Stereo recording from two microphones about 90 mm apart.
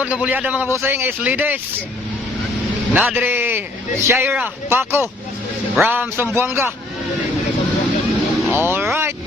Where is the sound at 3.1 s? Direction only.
20° right (ahead or behind).